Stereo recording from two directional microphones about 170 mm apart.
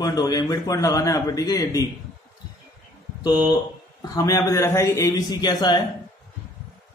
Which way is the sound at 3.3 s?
25° left (ahead or behind).